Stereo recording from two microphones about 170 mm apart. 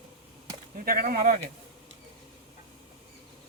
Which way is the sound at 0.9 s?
60° right (ahead or behind).